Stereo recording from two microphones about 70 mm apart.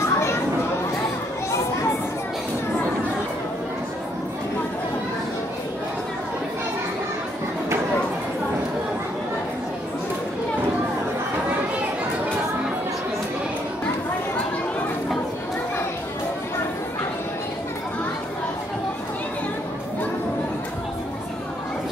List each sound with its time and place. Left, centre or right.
0.0 s children playing: left